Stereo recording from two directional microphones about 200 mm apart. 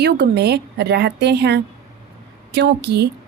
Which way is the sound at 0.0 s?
55° right (ahead or behind).